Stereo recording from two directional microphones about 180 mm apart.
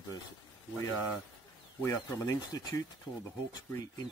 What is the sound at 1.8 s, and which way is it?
Speech, 20° left (ahead or behind).